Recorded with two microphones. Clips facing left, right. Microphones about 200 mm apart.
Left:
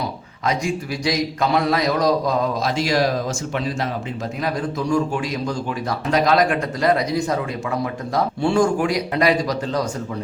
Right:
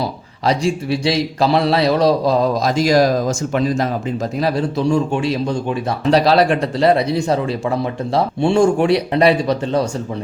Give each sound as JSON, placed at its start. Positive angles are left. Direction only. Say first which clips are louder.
{"t": 0.4, "sound": "a man's voice", "louder": "right 5 dB", "side_deg": -30}
{"t": 4.4, "sound": "speech", "louder": "right 5 dB", "side_deg": -30}